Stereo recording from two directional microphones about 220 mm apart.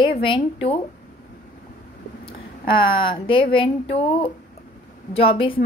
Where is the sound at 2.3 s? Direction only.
25° left (ahead or behind).